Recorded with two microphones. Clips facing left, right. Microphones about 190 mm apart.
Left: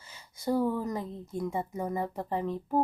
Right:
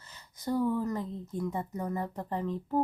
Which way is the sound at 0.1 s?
10° left (ahead or behind).